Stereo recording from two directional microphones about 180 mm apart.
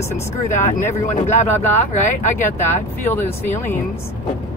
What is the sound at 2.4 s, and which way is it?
Speech, 10° left (ahead or behind).